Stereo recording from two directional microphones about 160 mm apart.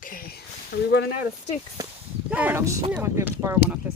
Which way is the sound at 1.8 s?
20° right (ahead or behind).